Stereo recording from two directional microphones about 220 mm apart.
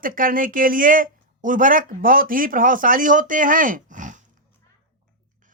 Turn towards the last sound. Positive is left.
turn(degrees=-35)  # may be behind; listen again after turning